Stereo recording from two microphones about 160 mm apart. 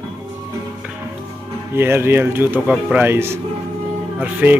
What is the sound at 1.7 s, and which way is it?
Speech, 15° right (ahead or behind).